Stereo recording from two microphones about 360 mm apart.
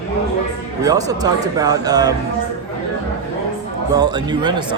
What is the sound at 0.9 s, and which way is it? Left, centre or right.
Speech, centre.